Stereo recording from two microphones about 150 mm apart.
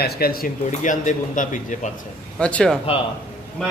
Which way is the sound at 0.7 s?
55° left (ahead or behind).